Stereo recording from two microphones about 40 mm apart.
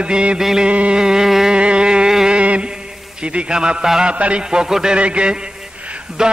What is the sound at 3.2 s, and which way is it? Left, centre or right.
Speech, right.